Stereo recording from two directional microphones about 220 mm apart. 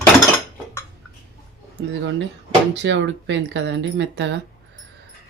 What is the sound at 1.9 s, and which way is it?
Speech, 55° right (ahead or behind).